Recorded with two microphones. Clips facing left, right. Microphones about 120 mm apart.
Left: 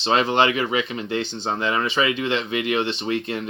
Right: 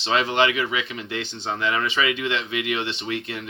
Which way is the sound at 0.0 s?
40° left (ahead or behind).